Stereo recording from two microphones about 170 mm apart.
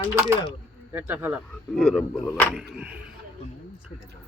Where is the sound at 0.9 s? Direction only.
10° right (ahead or behind).